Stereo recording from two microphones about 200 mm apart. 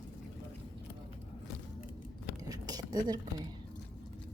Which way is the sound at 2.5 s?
20° right (ahead or behind).